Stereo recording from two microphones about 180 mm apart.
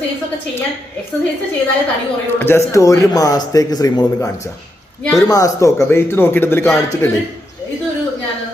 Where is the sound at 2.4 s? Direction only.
15° left (ahead or behind).